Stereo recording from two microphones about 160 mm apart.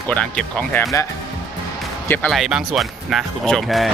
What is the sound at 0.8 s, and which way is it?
Speech, 20° left (ahead or behind).